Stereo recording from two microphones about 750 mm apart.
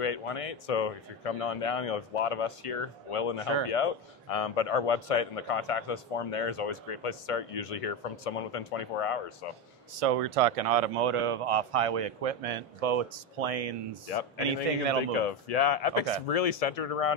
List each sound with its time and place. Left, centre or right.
0.0 s a man's voice: left
9.9 s speech: right
15.2 s a man's voice: left